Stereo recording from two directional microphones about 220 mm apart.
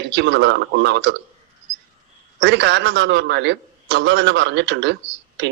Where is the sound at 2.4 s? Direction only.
55° right (ahead or behind).